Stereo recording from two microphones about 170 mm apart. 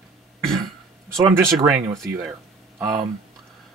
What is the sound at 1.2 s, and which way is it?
Speech, 20° right (ahead or behind).